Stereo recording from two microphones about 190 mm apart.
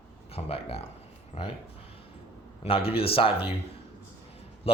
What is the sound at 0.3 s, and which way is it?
A man's voice, 30° left (ahead or behind).